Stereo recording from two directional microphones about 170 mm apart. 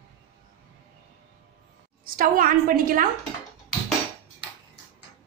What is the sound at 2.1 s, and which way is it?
Speech, 55° right (ahead or behind).